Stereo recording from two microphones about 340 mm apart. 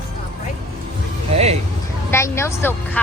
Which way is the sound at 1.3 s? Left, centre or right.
Centre.